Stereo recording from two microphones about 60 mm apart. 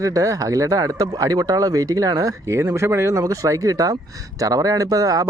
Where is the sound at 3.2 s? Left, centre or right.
Right.